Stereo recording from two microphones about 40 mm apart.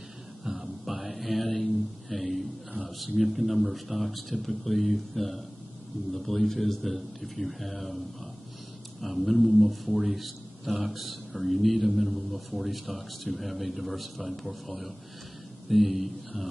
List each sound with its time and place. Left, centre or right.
0.5 s mantra: centre
3.2 s a man's voice: centre
9.0 s a man's voice: centre